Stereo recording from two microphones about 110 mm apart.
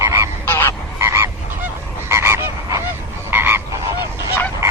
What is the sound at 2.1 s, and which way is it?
Frog, 25° right (ahead or behind).